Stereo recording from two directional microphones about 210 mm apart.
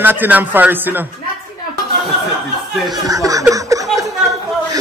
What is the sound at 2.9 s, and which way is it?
Chuckle, 15° right (ahead or behind).